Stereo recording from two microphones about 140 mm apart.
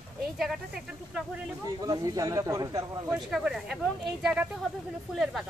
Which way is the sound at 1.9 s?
25° right (ahead or behind).